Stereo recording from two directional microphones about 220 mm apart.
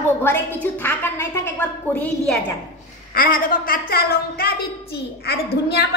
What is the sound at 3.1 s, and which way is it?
A woman's voice, 40° left (ahead or behind).